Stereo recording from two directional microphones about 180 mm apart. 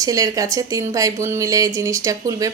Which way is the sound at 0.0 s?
20° right (ahead or behind).